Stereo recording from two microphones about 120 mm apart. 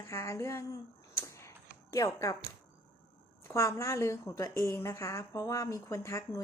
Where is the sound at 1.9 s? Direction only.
25° left (ahead or behind).